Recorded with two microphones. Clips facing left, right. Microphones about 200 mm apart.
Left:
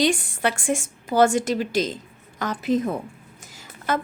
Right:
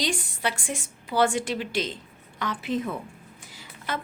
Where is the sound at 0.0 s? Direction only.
50° left (ahead or behind).